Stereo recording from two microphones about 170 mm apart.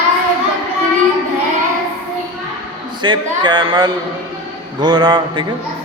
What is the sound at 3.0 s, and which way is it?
A man's voice, 30° right (ahead or behind).